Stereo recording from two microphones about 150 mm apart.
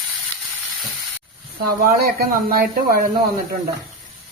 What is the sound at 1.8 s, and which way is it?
Speech, 75° right (ahead or behind).